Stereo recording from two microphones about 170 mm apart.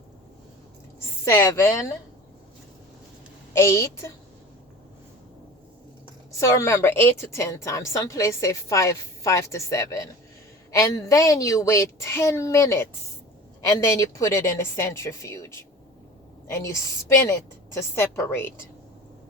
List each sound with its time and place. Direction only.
0.9 s a woman's voice: 15° left (ahead or behind)
3.5 s a woman's voice: 15° left (ahead or behind)
6.4 s a woman's voice: 15° left (ahead or behind)